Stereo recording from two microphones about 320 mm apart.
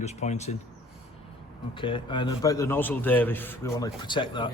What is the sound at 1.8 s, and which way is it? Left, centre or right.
A man's voice, centre.